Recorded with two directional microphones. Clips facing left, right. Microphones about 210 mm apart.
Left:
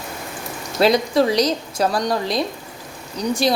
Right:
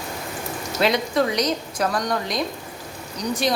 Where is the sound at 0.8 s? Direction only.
35° left (ahead or behind).